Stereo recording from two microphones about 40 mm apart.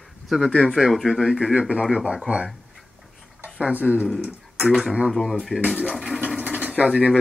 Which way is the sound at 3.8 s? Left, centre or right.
Right.